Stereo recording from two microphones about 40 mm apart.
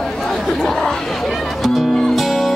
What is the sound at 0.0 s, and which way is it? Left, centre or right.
Chatter, centre.